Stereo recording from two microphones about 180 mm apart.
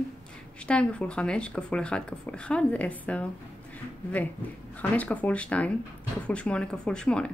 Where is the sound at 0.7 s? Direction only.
5° left (ahead or behind).